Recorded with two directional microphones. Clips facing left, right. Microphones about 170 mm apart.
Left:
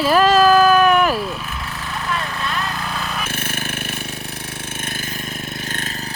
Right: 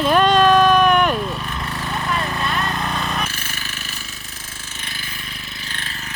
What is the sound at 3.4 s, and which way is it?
Jackhammer, 55° left (ahead or behind).